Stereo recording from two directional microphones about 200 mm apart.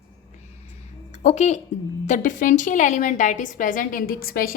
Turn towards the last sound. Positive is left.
turn(degrees=45)  # may be behind; listen again after turning